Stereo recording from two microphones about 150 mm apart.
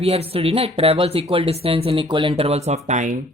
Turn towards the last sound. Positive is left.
turn(degrees=-50)  # may be behind; listen again after turning